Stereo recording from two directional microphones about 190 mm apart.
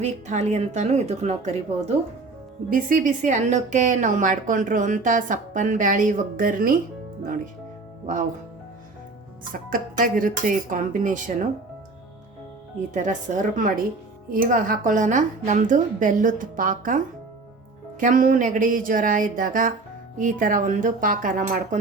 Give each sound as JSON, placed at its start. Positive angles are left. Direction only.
{"t": 0.0, "sound": "a woman's voice", "side_deg": -35}
{"t": 9.5, "sound": "a woman's voice", "side_deg": -45}
{"t": 12.9, "sound": "a woman's voice", "side_deg": -40}
{"t": 18.0, "sound": "a woman's voice", "side_deg": -45}